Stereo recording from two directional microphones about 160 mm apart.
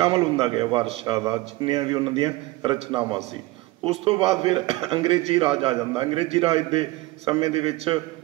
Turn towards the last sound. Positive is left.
turn(degrees=-35)  # may be behind; listen again after turning